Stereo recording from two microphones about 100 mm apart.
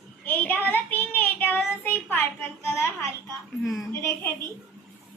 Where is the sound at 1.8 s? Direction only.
20° left (ahead or behind).